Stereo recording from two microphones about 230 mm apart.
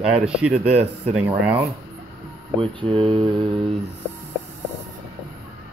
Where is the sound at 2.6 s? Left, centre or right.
Right.